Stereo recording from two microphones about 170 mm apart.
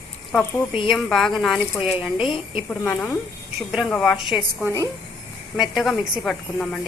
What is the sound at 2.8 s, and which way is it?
Speech, 10° left (ahead or behind).